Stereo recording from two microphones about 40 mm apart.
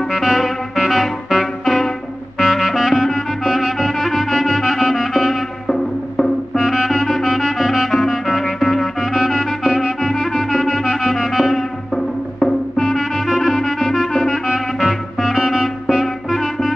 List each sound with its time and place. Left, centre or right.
0.1 s music: centre
1.6 s music: centre
5.3 s music: centre
6.5 s music: centre
7.9 s music: centre
9.6 s music: centre
10.1 s music: centre
11.5 s music: centre
15.3 s music: centre
15.6 s music: centre